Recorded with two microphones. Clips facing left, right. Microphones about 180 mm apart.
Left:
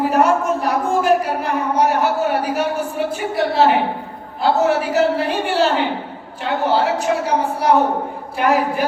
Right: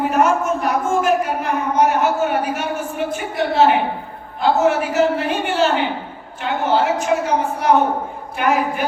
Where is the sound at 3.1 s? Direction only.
35° left (ahead or behind).